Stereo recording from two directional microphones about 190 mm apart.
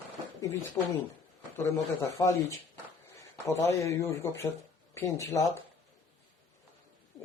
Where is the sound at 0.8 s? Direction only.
20° left (ahead or behind).